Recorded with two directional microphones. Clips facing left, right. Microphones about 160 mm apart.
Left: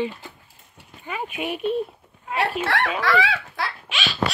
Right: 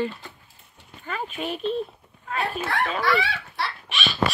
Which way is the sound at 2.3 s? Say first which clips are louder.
Left 3 dB; 75° left (ahead or behind).